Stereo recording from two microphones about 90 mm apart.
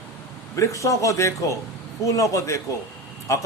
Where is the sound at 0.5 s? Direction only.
35° left (ahead or behind).